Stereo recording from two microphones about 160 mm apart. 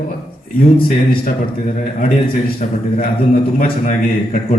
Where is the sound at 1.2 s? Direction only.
50° left (ahead or behind).